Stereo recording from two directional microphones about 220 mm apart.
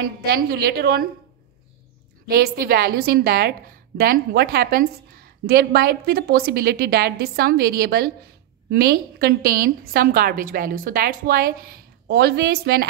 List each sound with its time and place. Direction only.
0.0 s a woman's voice: 45° right (ahead or behind)
2.2 s a woman's voice: 45° right (ahead or behind)